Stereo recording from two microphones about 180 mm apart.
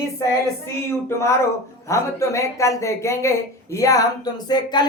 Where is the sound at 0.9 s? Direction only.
15° left (ahead or behind).